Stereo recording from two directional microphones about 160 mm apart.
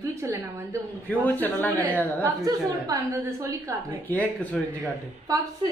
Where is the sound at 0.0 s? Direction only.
15° right (ahead or behind).